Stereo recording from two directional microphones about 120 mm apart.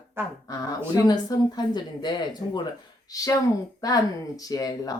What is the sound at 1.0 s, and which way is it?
Speech, 35° left (ahead or behind).